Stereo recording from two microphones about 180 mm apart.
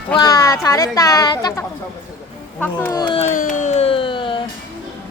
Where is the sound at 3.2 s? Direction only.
45° left (ahead or behind); by 4.4 s 25° left (ahead or behind).